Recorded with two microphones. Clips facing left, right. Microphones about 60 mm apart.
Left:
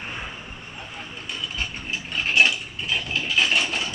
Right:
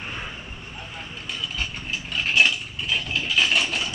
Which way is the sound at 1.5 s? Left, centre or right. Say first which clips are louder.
Even; left.